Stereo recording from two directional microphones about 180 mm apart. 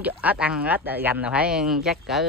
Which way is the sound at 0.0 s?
10° right (ahead or behind).